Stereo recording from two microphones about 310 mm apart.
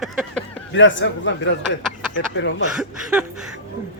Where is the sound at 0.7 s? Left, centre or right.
Left.